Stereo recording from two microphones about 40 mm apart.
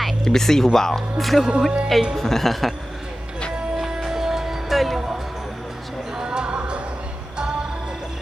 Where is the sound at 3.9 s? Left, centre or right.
Centre.